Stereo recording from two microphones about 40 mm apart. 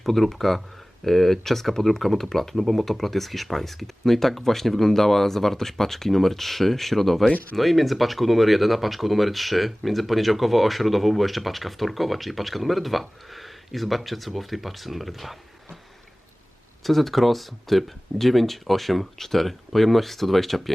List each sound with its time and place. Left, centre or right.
0.0 s speech: centre
16.8 s speech: centre